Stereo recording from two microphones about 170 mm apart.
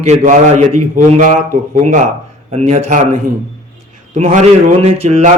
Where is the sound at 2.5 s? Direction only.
40° right (ahead or behind).